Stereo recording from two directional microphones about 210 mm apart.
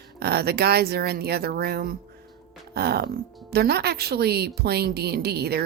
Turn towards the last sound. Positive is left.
turn(degrees=-50)  # may be behind; listen again after turning